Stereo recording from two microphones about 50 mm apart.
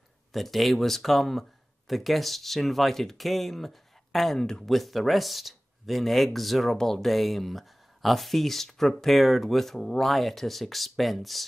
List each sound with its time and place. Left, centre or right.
0.3 s speech: centre